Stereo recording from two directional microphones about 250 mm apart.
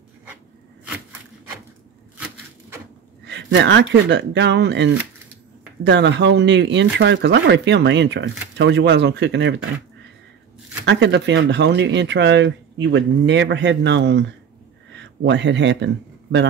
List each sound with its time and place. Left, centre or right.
3.3 s speech: right
10.9 s a man's voice: right